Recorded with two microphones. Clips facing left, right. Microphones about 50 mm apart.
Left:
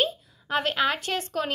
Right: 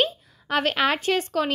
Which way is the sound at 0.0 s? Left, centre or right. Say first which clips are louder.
Right 2 dB; right.